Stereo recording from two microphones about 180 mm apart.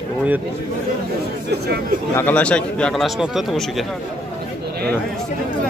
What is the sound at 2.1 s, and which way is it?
Speech, 10° left (ahead or behind).